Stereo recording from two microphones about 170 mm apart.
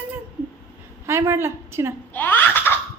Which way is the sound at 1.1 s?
15° right (ahead or behind).